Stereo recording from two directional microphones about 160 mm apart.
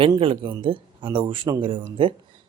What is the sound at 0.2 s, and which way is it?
Speech, 30° right (ahead or behind).